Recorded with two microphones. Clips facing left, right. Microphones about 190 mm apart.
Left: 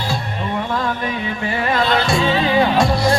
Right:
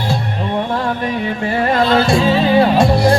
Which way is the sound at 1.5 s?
45° right (ahead or behind).